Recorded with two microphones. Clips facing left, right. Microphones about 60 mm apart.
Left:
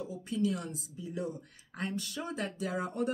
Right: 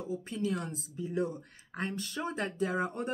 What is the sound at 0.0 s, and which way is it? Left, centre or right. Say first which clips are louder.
Speech: left 2 dB; right.